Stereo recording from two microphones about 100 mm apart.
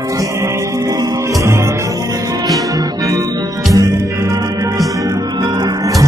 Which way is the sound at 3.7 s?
35° right (ahead or behind).